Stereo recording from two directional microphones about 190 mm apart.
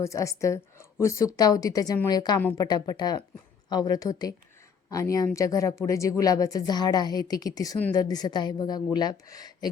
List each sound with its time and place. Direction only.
0.0 s a woman's voice: 15° left (ahead or behind)